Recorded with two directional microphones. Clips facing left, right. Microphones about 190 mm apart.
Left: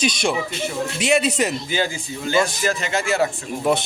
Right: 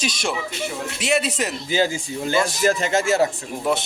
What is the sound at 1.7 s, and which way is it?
Speech, 35° right (ahead or behind).